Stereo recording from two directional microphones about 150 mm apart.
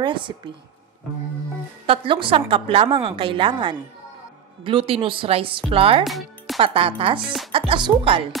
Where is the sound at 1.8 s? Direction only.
35° right (ahead or behind).